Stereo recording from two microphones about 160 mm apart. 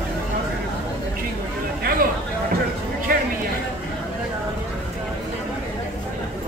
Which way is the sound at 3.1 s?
65° right (ahead or behind).